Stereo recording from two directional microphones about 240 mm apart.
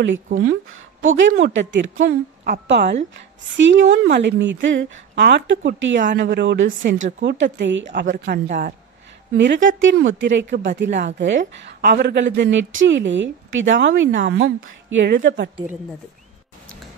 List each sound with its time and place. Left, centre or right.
1.1 s a woman's voice: right
2.4 s a woman's voice: right